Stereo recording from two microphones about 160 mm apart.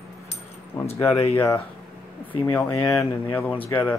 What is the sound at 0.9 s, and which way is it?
Speech, 20° left (ahead or behind).